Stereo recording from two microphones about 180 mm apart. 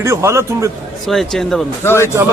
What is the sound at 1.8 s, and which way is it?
Speech, 15° left (ahead or behind).